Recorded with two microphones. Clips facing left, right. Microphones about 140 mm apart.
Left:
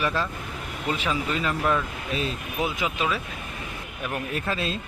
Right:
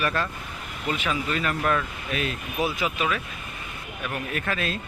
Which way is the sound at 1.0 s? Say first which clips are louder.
Even; 20° left (ahead or behind).